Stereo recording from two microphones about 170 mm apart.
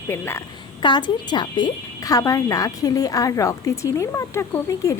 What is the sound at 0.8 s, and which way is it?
Speech, 25° left (ahead or behind).